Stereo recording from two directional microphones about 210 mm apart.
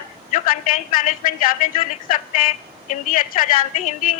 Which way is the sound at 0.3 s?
35° left (ahead or behind).